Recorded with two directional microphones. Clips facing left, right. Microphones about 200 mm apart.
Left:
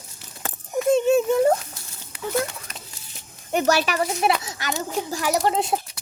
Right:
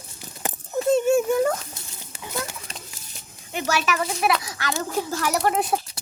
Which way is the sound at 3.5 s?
40° left (ahead or behind).